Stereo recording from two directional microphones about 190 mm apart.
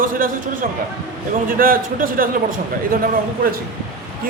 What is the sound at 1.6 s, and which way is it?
Speech, 50° right (ahead or behind).